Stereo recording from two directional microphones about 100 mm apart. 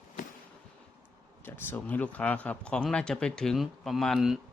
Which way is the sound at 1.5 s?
20° left (ahead or behind).